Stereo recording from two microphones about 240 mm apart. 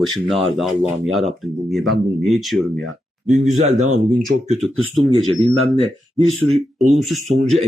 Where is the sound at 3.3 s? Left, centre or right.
Right.